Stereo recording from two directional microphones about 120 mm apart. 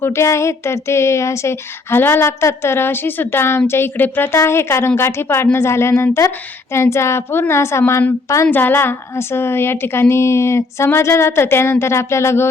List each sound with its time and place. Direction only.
0.0 s a woman's voice: 25° left (ahead or behind)